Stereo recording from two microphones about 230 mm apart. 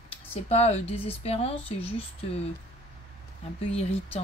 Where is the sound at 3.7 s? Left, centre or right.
Left.